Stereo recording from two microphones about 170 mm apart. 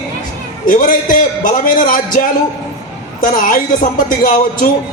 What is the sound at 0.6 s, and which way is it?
A man's voice, 50° left (ahead or behind).